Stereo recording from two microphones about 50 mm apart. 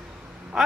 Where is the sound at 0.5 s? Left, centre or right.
Centre.